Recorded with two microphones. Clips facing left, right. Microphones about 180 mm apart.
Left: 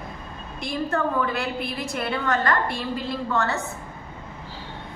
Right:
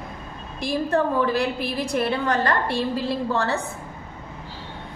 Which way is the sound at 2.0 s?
30° right (ahead or behind).